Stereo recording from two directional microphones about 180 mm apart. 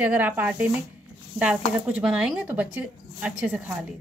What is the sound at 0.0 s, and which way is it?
Speech, 10° right (ahead or behind).